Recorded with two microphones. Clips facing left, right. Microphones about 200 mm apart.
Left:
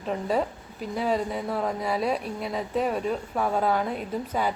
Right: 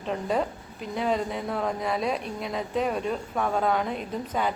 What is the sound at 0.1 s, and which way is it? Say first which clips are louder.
A woman's voice: left 1 dB; 5° left (ahead or behind).